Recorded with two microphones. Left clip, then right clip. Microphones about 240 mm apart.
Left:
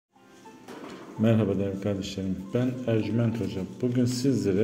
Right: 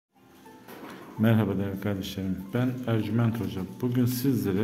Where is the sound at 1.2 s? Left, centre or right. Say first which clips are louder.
Left 2 dB; centre.